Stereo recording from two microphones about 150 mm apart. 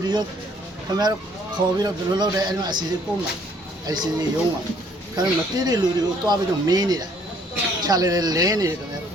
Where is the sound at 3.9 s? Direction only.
25° right (ahead or behind).